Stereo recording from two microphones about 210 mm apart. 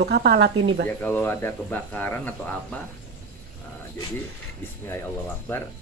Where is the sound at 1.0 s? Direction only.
10° left (ahead or behind).